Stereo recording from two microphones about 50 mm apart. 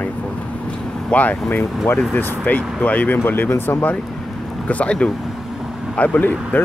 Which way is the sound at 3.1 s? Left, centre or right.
Left.